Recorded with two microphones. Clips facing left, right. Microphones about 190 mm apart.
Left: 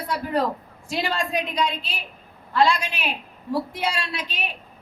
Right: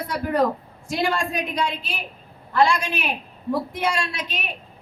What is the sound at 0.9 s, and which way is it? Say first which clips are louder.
A man's voice: right 2 dB; 55° right (ahead or behind).